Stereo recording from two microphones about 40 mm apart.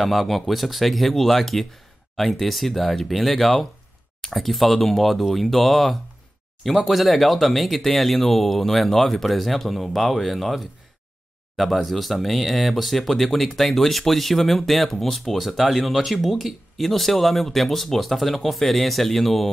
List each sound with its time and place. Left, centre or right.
0.0 s speech: centre